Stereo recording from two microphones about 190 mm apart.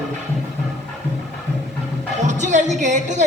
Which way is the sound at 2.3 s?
40° right (ahead or behind).